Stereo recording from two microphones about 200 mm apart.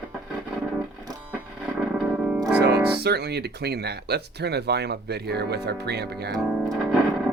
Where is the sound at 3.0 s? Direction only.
55° right (ahead or behind).